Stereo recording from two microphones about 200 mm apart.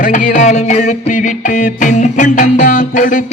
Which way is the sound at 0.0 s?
40° left (ahead or behind).